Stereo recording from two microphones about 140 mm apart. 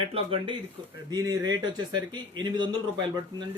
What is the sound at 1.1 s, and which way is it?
Speech, 25° right (ahead or behind).